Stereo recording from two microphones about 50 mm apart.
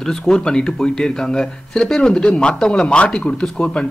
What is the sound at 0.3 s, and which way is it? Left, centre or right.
Speech, centre.